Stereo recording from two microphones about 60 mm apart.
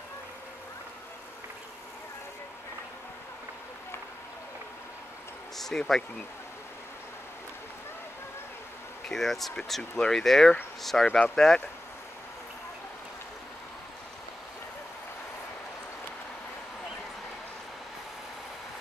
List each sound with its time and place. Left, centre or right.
5.6 s speech: centre
9.1 s speech: centre
9.9 s speech: centre
11.1 s speech: left
11.3 s speech: centre